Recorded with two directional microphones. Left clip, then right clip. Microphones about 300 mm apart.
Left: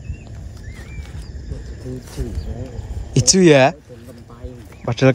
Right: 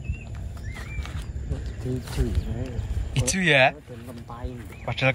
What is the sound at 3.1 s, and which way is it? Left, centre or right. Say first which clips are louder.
Speech: left 9 dB; centre.